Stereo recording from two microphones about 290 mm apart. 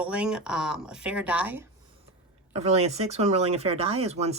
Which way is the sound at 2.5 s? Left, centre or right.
Right.